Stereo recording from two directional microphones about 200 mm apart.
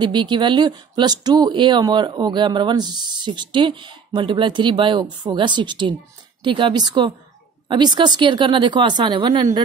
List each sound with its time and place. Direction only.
0.0 s speech: 25° right (ahead or behind)